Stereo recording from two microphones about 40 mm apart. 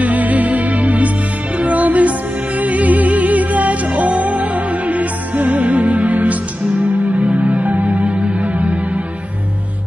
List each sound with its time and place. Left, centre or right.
0.0 s music: right